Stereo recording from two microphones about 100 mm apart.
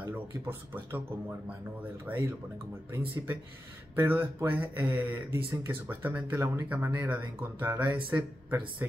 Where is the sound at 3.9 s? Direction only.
20° right (ahead or behind).